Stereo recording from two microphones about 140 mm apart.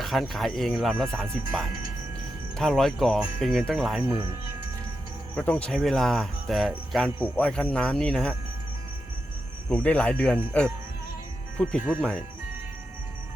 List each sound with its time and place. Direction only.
0.0 s speech: centre (ahead or behind)
4.0 s speech: 20° right (ahead or behind)
5.3 s speech: 15° left (ahead or behind)
9.6 s speech: 10° left (ahead or behind)
11.5 s speech: 5° left (ahead or behind)